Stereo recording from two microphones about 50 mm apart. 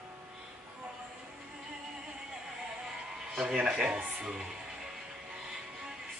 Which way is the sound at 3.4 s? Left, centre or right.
Centre.